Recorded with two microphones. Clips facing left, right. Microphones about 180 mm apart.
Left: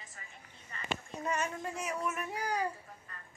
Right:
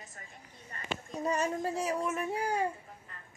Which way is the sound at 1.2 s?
35° right (ahead or behind).